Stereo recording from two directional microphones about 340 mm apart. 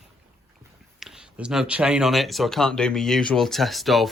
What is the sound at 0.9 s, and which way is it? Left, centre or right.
Speech, centre.